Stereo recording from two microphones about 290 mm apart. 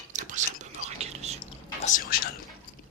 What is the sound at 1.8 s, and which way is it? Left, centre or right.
Whispering, left.